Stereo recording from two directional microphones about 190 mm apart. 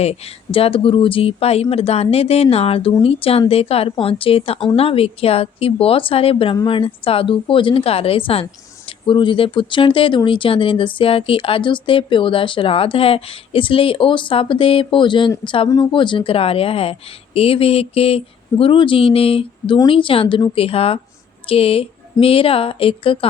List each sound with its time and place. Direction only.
0.0 s a woman's voice: 30° left (ahead or behind)